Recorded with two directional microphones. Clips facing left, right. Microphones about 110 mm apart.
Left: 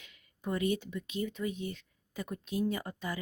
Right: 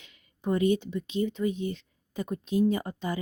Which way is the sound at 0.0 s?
25° right (ahead or behind).